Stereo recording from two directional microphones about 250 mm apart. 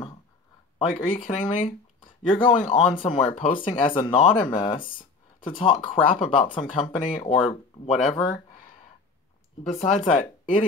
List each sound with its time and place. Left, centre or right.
0.7 s speech: centre
9.6 s speech: left